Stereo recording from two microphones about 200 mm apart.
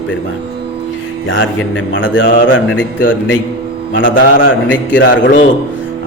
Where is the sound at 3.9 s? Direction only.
70° left (ahead or behind).